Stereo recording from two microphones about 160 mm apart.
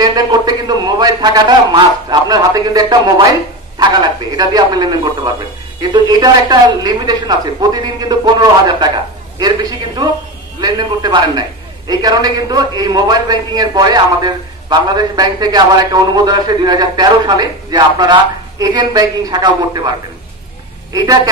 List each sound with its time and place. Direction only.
0.0 s a man's voice: 25° right (ahead or behind)
20.9 s a man's voice: 25° right (ahead or behind)